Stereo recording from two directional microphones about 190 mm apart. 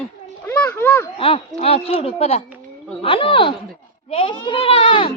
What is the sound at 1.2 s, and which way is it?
A child's voice, 30° left (ahead or behind).